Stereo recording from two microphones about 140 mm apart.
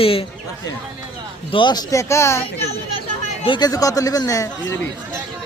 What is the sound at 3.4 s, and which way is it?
Speech, 30° left (ahead or behind).